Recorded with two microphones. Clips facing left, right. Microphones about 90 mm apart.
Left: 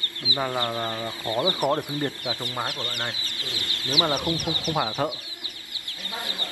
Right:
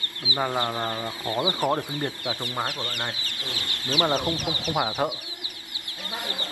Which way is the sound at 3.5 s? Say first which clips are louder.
Even; 15° left (ahead or behind).